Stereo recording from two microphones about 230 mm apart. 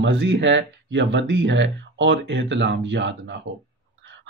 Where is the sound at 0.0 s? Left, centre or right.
Right.